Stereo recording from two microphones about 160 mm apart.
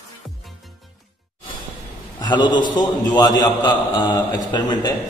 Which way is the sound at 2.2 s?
30° left (ahead or behind).